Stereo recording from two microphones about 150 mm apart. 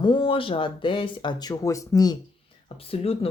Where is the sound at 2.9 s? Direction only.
40° left (ahead or behind).